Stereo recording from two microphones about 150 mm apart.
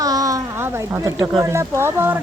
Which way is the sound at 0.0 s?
25° right (ahead or behind).